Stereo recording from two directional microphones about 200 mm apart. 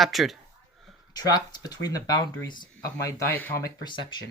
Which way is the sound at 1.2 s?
20° left (ahead or behind).